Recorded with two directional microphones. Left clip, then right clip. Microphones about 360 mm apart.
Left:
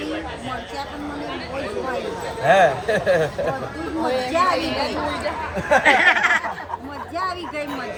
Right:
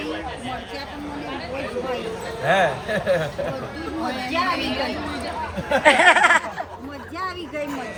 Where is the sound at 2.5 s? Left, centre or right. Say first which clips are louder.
Left 4 dB; left.